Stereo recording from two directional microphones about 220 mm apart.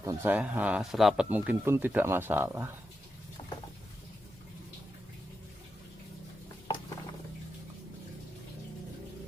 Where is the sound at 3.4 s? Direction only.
25° left (ahead or behind).